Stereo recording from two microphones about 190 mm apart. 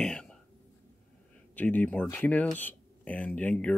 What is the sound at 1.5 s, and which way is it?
Speech, 10° left (ahead or behind).